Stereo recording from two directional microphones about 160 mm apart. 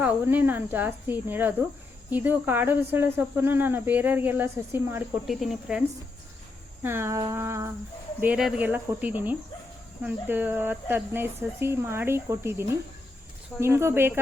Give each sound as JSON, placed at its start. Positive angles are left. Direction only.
{"t": 0.0, "sound": "speech", "side_deg": -10}
{"t": 5.2, "sound": "speech", "side_deg": 0}
{"t": 6.8, "sound": "speech", "side_deg": -15}
{"t": 8.2, "sound": "speech", "side_deg": -5}